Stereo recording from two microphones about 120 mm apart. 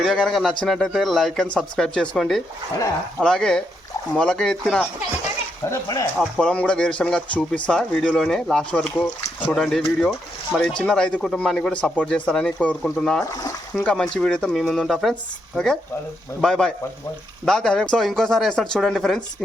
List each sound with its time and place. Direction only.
0.0 s speech: 5° left (ahead or behind)
5.7 s speech: 30° left (ahead or behind)
6.1 s speech: 10° left (ahead or behind)
13.2 s speech: 30° left (ahead or behind)
13.7 s speech: 5° left (ahead or behind)